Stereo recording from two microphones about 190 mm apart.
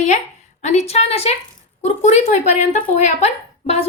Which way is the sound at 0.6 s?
35° left (ahead or behind).